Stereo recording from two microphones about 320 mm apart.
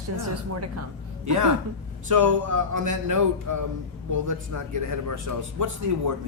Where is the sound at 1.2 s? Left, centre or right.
Right.